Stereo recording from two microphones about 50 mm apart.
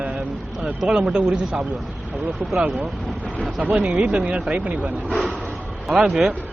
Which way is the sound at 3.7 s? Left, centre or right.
Right.